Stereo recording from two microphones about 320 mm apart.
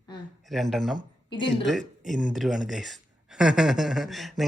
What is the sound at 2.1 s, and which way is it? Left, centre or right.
Speech, left.